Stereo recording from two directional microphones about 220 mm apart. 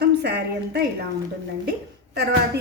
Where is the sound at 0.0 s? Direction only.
50° right (ahead or behind).